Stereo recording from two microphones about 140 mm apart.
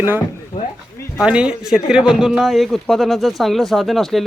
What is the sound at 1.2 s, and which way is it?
A man's voice, 5° right (ahead or behind).